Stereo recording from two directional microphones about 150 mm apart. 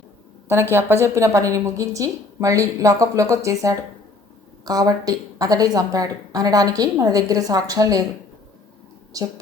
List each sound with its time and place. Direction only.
0.4 s a woman's voice: 15° right (ahead or behind)